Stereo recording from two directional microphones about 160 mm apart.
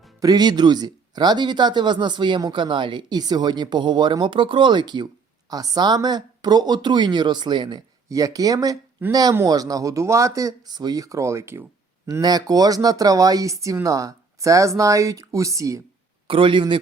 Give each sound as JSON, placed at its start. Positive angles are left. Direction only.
{"t": 0.2, "sound": "speech", "side_deg": -25}
{"t": 16.2, "sound": "a man's voice", "side_deg": -35}